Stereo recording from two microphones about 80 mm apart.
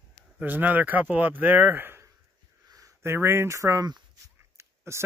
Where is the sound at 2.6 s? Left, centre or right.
Right.